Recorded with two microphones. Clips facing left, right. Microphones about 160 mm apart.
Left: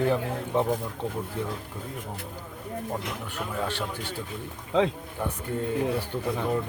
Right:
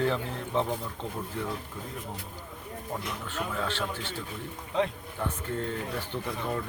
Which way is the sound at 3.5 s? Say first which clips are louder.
Left 4 dB; 15° left (ahead or behind).